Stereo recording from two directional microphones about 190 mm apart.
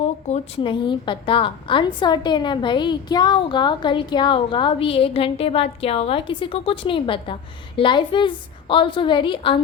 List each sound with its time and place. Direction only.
0.0 s a woman's voice: 35° left (ahead or behind)